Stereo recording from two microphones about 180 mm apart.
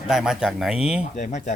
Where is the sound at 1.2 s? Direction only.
40° left (ahead or behind).